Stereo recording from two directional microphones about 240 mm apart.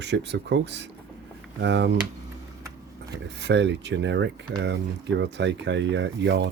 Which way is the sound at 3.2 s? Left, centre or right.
Right.